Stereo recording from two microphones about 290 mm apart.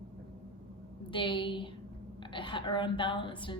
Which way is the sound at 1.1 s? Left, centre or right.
Centre.